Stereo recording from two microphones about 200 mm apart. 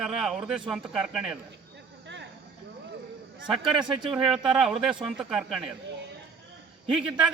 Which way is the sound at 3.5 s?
5° right (ahead or behind).